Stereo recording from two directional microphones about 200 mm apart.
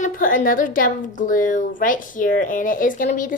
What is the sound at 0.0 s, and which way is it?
A woman's voice, 40° left (ahead or behind).